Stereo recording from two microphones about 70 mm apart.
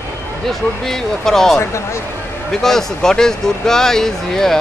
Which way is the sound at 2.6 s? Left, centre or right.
Centre.